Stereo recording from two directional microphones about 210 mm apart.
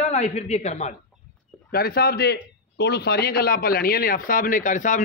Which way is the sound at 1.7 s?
45° left (ahead or behind).